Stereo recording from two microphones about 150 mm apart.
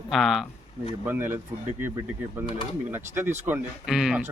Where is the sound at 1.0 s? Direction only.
15° right (ahead or behind).